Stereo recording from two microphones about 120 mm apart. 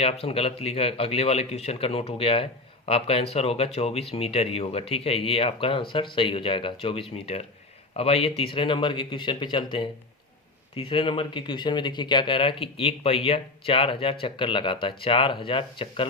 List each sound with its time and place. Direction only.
0.0 s speech: 55° left (ahead or behind)